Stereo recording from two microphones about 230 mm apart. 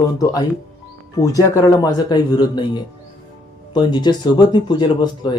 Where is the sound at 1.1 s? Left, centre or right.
Centre.